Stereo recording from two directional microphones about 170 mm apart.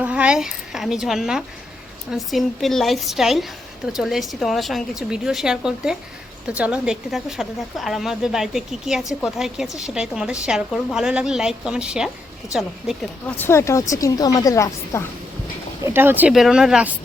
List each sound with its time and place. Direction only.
0.0 s a woman's voice: 5° right (ahead or behind); by 15.0 s 20° left (ahead or behind)
15.8 s speech: 15° right (ahead or behind)